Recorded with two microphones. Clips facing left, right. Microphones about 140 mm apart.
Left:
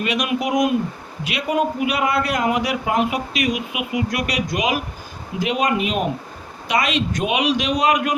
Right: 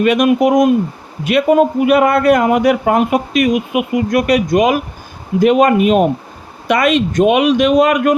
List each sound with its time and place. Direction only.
0.0 s a man's voice: 50° right (ahead or behind)